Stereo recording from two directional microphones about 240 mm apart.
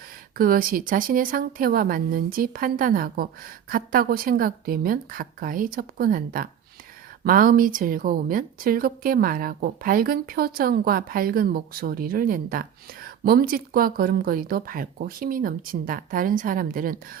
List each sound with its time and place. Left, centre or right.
0.3 s a woman's voice: right